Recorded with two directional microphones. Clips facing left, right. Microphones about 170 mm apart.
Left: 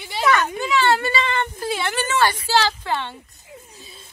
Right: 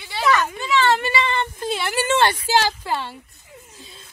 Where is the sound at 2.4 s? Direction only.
15° right (ahead or behind).